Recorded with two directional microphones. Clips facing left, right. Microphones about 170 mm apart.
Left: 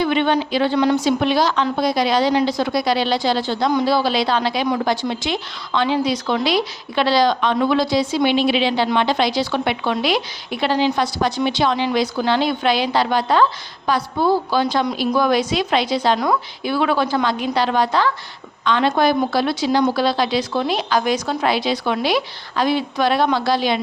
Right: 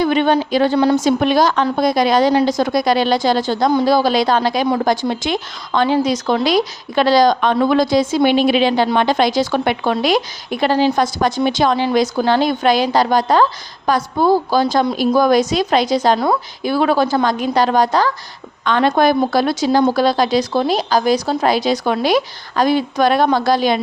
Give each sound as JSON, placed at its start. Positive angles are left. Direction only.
{"t": 0.0, "sound": "a woman's voice", "side_deg": -40}